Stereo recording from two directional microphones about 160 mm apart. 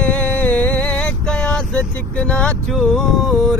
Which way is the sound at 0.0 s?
10° left (ahead or behind).